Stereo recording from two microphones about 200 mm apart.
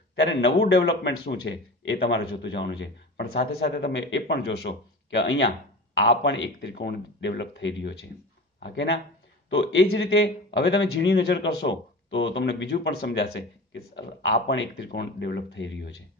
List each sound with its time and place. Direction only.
0.1 s a man's voice: 60° left (ahead or behind)